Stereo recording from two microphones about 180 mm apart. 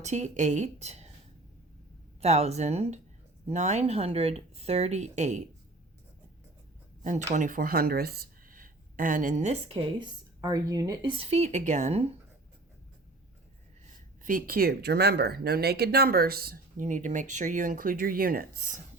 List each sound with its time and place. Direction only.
0.0 s speech: 40° right (ahead or behind)
2.2 s speech: 35° right (ahead or behind)
7.0 s speech: 40° right (ahead or behind)
10.0 s speech: 20° right (ahead or behind)
11.2 s speech: 35° right (ahead or behind)
14.3 s speech: 50° right (ahead or behind)